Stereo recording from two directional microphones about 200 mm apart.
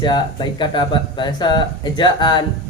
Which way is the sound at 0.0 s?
20° left (ahead or behind).